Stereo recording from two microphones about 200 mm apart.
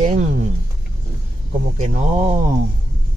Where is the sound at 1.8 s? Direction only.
35° right (ahead or behind).